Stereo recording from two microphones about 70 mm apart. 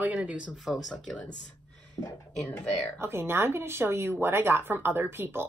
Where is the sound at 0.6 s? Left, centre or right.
Centre.